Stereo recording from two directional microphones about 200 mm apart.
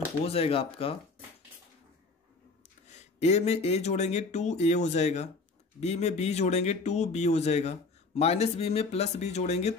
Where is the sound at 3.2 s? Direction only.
35° left (ahead or behind).